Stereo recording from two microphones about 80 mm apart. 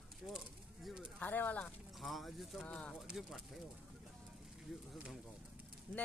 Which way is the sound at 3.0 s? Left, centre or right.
Centre.